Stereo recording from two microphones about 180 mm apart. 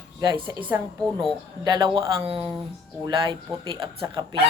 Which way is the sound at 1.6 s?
25° right (ahead or behind).